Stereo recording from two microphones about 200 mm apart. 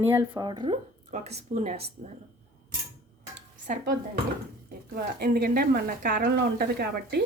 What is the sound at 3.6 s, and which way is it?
Speech, 40° right (ahead or behind).